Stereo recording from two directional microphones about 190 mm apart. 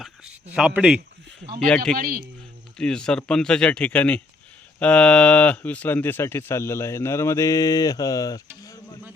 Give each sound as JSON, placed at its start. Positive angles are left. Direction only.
{"t": 0.5, "sound": "speech", "side_deg": -5}
{"t": 1.6, "sound": "speech", "side_deg": 5}
{"t": 2.0, "sound": "a man's voice", "side_deg": -50}
{"t": 2.7, "sound": "speech", "side_deg": 5}
{"t": 8.6, "sound": "insect", "side_deg": 20}